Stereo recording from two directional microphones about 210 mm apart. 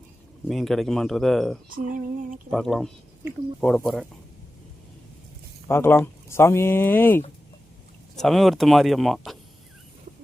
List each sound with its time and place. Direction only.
0.4 s speech: centre (ahead or behind)
1.7 s a sound: 40° right (ahead or behind)
2.5 s speech: centre (ahead or behind)
5.6 s speech: 10° left (ahead or behind)